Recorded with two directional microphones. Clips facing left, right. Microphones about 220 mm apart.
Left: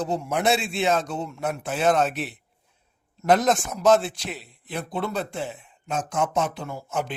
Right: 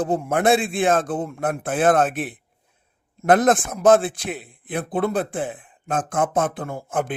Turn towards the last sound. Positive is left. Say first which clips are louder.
# right 4 dB
turn(degrees=-50)  # may be behind; listen again after turning